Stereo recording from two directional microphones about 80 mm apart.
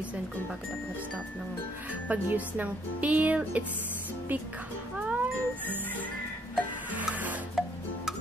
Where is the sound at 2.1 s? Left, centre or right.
Right.